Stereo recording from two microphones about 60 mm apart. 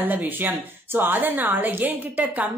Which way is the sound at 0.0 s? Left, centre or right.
Right.